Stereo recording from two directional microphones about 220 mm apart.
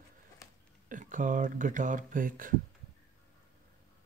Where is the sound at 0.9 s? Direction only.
35° right (ahead or behind).